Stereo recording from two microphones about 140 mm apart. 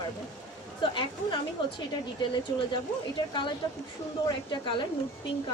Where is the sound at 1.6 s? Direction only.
35° left (ahead or behind).